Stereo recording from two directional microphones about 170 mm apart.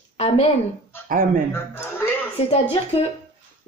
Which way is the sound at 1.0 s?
55° right (ahead or behind).